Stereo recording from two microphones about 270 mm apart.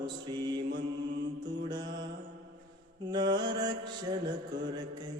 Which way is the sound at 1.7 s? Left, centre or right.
Centre.